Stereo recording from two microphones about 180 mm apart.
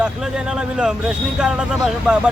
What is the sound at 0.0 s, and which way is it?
Speech, 5° right (ahead or behind).